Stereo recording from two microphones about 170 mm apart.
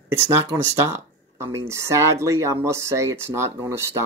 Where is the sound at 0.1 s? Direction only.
15° right (ahead or behind).